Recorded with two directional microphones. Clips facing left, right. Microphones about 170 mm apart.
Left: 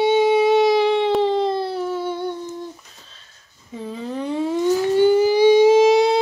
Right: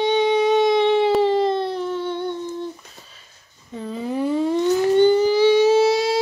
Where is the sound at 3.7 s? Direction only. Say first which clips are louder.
Even; 5° left (ahead or behind).